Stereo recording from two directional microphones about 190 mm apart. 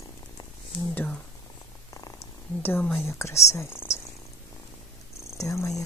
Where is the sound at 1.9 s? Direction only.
15° left (ahead or behind).